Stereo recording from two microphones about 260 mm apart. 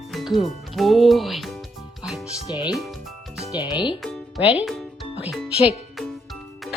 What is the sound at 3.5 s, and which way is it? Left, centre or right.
Speech, centre.